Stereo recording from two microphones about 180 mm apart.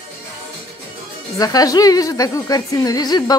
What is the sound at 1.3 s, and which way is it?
Speech, 20° left (ahead or behind).